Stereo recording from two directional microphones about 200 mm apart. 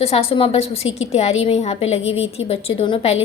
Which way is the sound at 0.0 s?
30° left (ahead or behind).